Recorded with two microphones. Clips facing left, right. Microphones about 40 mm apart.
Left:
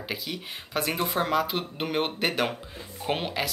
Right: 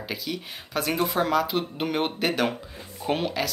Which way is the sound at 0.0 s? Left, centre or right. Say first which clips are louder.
Right 2 dB; centre.